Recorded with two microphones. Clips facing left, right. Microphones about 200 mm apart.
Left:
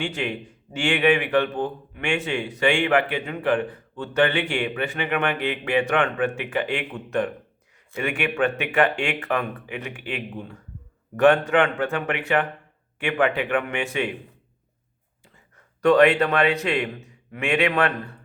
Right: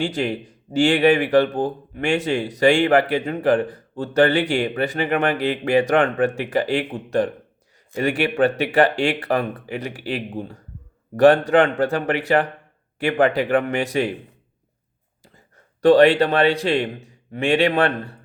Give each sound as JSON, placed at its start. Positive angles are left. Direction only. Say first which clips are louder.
{"t": 0.0, "sound": "speech", "louder": "right 5 dB", "side_deg": -35}
{"t": 15.8, "sound": "speech", "louder": "right 4 dB", "side_deg": -30}